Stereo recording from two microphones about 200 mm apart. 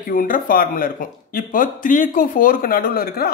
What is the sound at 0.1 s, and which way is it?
Speech, 45° left (ahead or behind).